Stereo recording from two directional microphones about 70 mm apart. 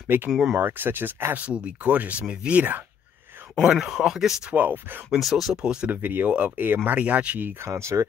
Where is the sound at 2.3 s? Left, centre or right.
Centre.